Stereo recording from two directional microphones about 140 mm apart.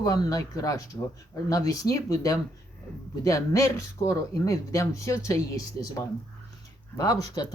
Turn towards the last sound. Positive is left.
turn(degrees=25)  # may be behind; listen again after turning